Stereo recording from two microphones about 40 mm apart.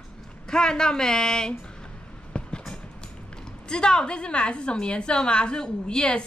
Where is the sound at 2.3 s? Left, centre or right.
Left.